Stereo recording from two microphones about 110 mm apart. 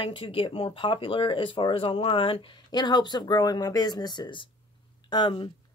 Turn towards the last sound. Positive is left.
turn(degrees=45)  # may be behind; listen again after turning